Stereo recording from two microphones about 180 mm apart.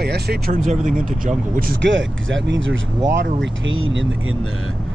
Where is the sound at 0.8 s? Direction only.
45° right (ahead or behind).